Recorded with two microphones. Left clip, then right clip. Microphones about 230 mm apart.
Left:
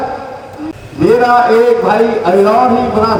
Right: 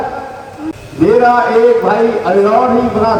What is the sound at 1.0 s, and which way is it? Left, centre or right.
A man's voice, left.